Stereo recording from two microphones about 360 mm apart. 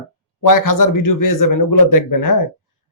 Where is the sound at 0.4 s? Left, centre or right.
Left.